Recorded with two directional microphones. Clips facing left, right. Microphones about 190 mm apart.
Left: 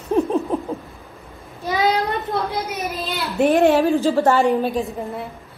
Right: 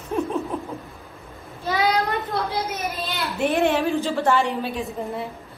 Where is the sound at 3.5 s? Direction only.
40° left (ahead or behind).